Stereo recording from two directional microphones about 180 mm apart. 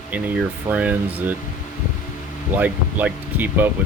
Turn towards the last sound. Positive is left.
turn(degrees=-10)  # may be behind; listen again after turning